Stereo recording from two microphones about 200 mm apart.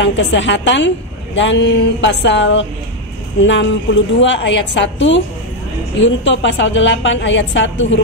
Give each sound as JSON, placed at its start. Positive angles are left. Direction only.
{"t": 0.0, "sound": "a woman's voice", "side_deg": 65}